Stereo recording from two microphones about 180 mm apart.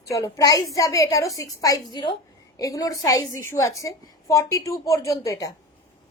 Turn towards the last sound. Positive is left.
turn(degrees=20)  # may be behind; listen again after turning